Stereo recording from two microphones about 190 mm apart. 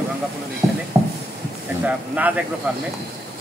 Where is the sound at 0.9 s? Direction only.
20° right (ahead or behind).